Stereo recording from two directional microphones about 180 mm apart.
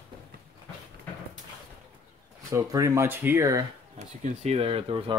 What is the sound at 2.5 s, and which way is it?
Speech, 20° right (ahead or behind).